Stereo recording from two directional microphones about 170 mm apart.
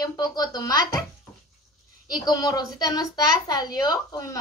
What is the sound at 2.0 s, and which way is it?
A woman's voice, 25° left (ahead or behind).